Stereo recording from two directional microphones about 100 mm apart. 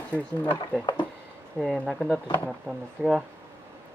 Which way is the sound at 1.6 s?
5° left (ahead or behind).